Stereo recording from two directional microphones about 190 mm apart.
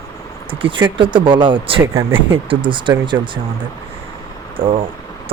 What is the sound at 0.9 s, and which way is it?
Speech, 25° right (ahead or behind).